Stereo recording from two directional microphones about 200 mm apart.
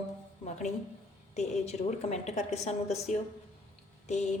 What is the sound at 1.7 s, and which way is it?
A woman's voice, 35° left (ahead or behind).